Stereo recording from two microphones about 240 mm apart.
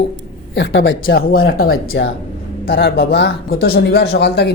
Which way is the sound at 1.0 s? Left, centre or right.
Left.